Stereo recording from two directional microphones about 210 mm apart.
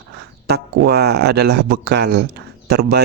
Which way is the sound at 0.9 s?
50° right (ahead or behind).